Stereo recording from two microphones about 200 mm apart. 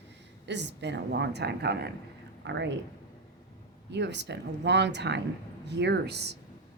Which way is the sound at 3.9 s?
60° right (ahead or behind).